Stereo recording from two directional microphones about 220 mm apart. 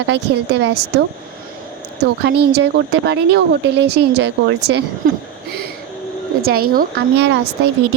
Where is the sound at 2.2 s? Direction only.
45° right (ahead or behind).